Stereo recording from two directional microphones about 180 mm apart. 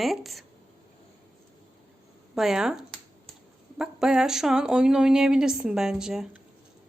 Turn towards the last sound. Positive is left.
turn(degrees=-5)  # may be behind; listen again after turning